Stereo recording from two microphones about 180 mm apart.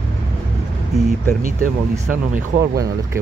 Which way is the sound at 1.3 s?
50° right (ahead or behind).